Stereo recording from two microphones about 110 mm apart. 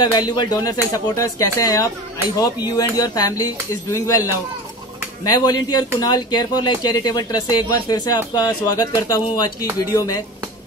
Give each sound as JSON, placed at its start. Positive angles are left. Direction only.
{"t": 0.0, "sound": "speech", "side_deg": 40}
{"t": 5.3, "sound": "speech", "side_deg": 40}